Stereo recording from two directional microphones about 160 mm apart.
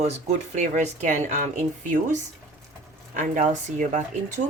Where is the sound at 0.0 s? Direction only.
45° right (ahead or behind).